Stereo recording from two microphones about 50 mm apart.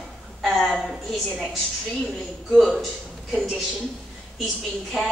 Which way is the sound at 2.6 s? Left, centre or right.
Centre.